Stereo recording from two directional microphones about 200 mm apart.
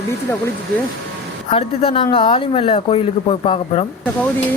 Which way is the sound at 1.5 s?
30° left (ahead or behind).